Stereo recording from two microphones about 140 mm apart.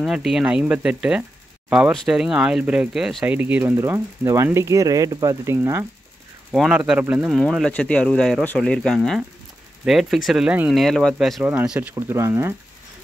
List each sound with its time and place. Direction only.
0.0 s speech: 5° right (ahead or behind)
6.5 s speech: 5° right (ahead or behind)
11.9 s speech: 20° right (ahead or behind)